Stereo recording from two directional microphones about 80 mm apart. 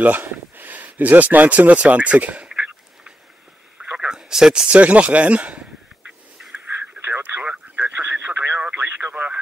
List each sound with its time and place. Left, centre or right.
0.0 s speech: right
6.0 s a sound: centre
7.0 s radio: right